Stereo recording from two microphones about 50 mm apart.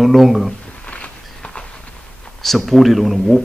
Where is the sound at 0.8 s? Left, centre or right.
Left.